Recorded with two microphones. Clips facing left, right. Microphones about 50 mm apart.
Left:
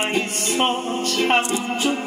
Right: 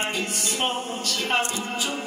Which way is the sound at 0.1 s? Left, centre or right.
Left.